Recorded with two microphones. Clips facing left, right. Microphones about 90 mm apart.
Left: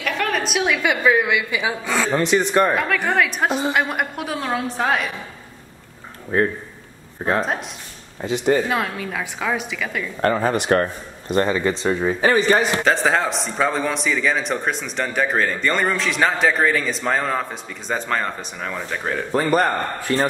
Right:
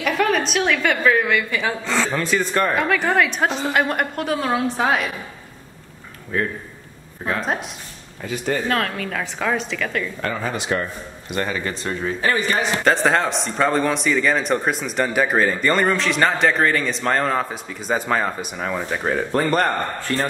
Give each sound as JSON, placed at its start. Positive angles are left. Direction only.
{"t": 0.0, "sound": "a woman's voice", "side_deg": 0}
{"t": 2.1, "sound": "a man's voice", "side_deg": 20}
{"t": 2.7, "sound": "speech", "side_deg": 0}
{"t": 6.3, "sound": "a man's voice", "side_deg": 30}
{"t": 8.2, "sound": "a woman's voice", "side_deg": 20}
{"t": 10.2, "sound": "speech", "side_deg": 40}
{"t": 10.5, "sound": "a man's voice", "side_deg": 50}
{"t": 11.8, "sound": "a man's voice", "side_deg": 15}
{"t": 12.8, "sound": "speech", "side_deg": 0}
{"t": 19.3, "sound": "speech", "side_deg": 5}